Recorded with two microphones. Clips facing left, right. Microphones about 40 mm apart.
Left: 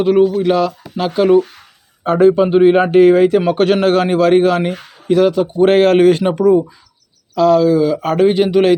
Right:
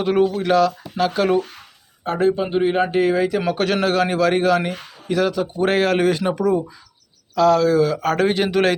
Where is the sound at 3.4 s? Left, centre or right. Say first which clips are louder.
Left 7 dB; left.